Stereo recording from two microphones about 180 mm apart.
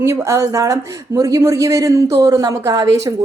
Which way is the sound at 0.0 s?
15° right (ahead or behind).